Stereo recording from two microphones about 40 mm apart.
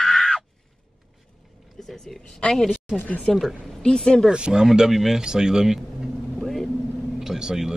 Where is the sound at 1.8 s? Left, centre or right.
Centre.